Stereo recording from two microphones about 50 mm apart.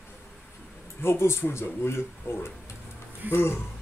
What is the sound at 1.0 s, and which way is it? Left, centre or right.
Speech, left.